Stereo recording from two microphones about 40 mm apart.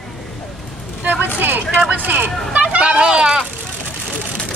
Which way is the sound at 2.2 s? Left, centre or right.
Right.